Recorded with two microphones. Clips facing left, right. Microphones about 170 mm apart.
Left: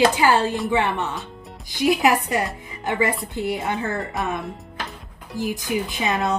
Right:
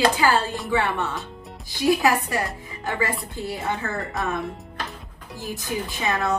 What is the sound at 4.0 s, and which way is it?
Speech, centre (ahead or behind).